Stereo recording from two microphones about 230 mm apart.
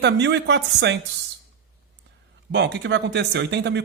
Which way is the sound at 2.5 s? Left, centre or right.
Right.